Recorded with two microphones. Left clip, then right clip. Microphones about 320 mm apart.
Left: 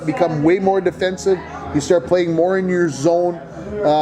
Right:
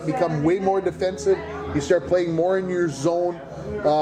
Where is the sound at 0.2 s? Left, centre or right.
Left.